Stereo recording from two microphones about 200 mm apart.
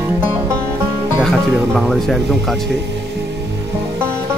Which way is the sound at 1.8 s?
Centre (ahead or behind).